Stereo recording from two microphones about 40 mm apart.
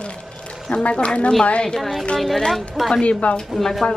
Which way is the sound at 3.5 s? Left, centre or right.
Centre.